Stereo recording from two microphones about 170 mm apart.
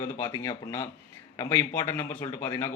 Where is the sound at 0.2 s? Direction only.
20° left (ahead or behind).